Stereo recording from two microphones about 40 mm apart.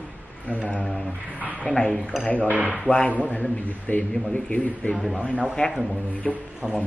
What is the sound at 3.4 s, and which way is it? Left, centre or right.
Speech, left.